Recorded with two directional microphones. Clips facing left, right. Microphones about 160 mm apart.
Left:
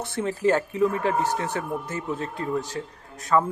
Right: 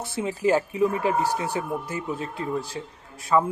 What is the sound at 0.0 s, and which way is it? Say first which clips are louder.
A man's voice: left 1 dB; 5° right (ahead or behind).